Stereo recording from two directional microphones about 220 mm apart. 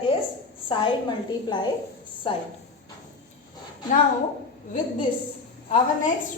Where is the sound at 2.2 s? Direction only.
25° left (ahead or behind).